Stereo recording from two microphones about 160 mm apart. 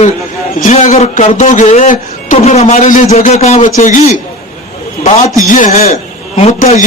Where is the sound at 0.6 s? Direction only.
50° left (ahead or behind).